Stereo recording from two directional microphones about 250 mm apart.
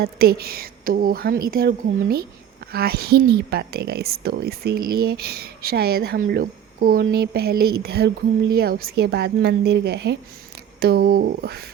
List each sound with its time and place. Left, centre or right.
0.0 s speech: right